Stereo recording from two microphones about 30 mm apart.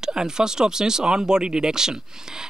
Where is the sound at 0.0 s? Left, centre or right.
Right.